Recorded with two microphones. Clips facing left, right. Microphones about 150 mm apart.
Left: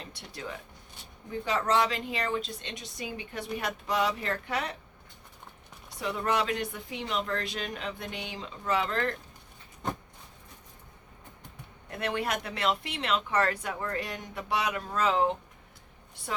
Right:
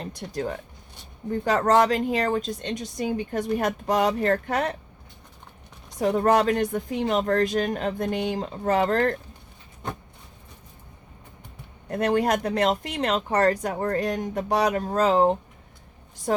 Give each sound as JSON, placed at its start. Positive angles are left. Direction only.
{"t": 0.0, "sound": "speech", "side_deg": -45}
{"t": 1.3, "sound": "speech", "side_deg": -45}
{"t": 6.0, "sound": "speech", "side_deg": -45}
{"t": 11.9, "sound": "speech", "side_deg": -40}